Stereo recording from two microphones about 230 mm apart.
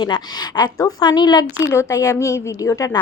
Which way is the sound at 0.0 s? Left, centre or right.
Centre.